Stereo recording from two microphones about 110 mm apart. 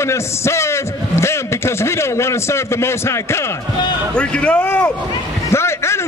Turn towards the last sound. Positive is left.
turn(degrees=25)  # may be behind; listen again after turning